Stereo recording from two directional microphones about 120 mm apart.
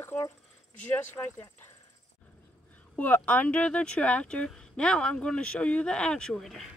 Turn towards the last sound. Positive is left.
turn(degrees=0)  # may be behind; listen again after turning